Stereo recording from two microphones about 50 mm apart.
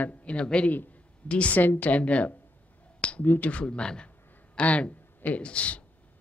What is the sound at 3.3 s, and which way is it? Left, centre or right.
Speech, left.